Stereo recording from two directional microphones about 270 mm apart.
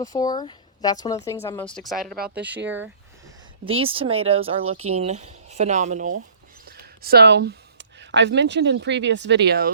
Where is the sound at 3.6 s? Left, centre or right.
Centre.